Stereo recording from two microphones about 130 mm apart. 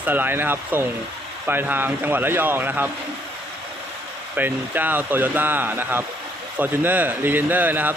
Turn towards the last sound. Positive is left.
turn(degrees=-15)  # may be behind; listen again after turning